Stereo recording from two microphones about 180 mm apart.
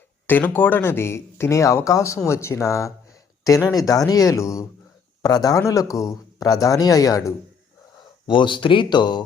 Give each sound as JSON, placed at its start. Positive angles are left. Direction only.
{"t": 0.3, "sound": "speech", "side_deg": 10}